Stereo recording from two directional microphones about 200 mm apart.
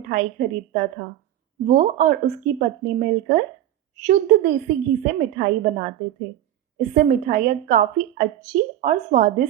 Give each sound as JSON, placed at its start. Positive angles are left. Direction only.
{"t": 0.1, "sound": "a woman's voice", "side_deg": -45}